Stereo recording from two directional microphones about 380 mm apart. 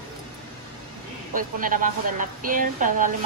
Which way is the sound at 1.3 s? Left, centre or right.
Right.